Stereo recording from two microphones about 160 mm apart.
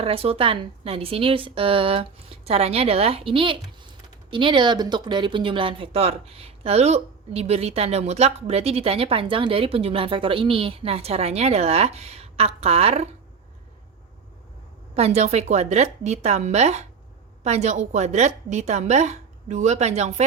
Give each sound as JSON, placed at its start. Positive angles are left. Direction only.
{"t": 0.0, "sound": "a woman's voice", "side_deg": -35}
{"t": 14.9, "sound": "a woman's voice", "side_deg": -40}